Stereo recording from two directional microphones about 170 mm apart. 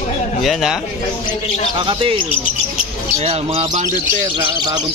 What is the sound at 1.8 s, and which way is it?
Speech, 30° right (ahead or behind).